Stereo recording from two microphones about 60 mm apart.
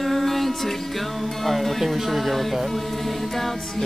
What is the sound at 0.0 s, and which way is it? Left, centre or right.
Music, centre.